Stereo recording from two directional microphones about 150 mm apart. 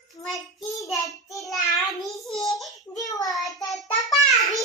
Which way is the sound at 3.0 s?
25° left (ahead or behind).